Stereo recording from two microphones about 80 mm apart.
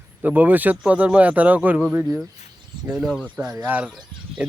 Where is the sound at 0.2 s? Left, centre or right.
Right.